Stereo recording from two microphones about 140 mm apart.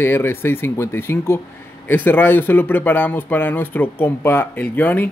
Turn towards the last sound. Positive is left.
turn(degrees=15)  # may be behind; listen again after turning